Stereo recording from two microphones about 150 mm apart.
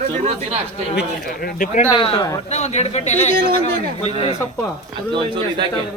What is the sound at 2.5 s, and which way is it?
Speech, 50° left (ahead or behind).